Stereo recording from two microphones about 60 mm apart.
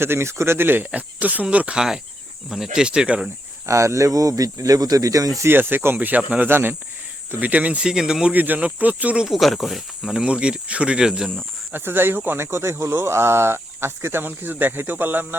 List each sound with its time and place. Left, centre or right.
0.0 s speech: right
0.9 s speech: right
2.5 s speech: centre
3.7 s speech: right
5.5 s speech: right
7.3 s speech: right
8.3 s speech: right
9.2 s speech: centre
11.7 s speech: right
12.5 s speech: right